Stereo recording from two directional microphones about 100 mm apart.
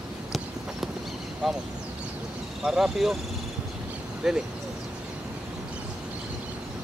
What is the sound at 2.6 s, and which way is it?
Speech, 5° right (ahead or behind).